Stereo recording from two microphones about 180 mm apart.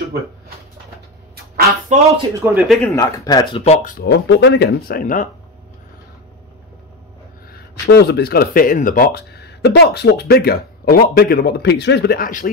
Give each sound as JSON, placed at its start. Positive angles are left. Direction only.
{"t": 1.9, "sound": "speech", "side_deg": -35}
{"t": 2.4, "sound": "speech", "side_deg": -10}
{"t": 2.9, "sound": "speech", "side_deg": 20}
{"t": 3.6, "sound": "speech", "side_deg": 35}
{"t": 3.9, "sound": "speech", "side_deg": 60}
{"t": 7.5, "sound": "speech", "side_deg": 65}